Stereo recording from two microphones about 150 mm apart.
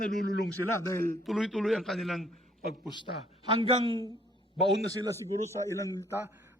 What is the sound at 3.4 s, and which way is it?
Speech, 35° right (ahead or behind).